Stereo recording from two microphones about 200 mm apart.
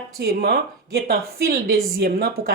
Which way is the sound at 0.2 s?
50° right (ahead or behind).